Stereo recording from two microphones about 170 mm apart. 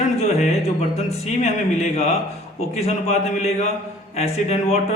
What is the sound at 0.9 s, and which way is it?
A man's voice, 40° left (ahead or behind).